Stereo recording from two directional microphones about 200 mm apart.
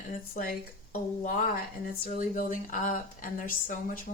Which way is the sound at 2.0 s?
40° left (ahead or behind).